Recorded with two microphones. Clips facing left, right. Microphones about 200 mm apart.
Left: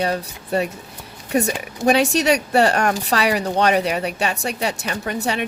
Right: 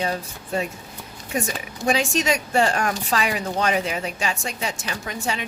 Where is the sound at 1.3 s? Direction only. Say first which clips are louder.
Left 7 dB; 65° left (ahead or behind).